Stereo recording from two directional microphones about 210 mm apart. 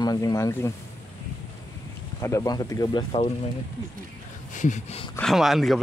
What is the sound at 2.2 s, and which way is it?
Speech, 15° left (ahead or behind).